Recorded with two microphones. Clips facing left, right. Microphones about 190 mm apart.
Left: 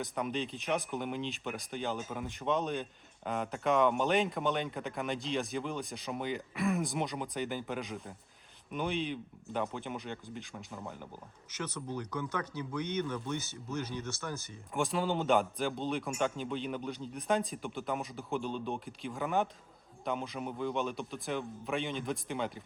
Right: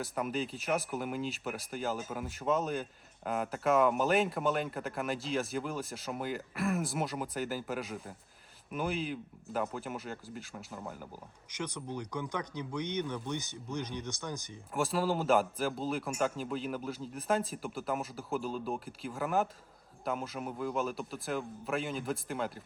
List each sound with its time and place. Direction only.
0.0 s speech: 5° right (ahead or behind)
11.5 s speech: 15° right (ahead or behind)
14.7 s speech: centre (ahead or behind)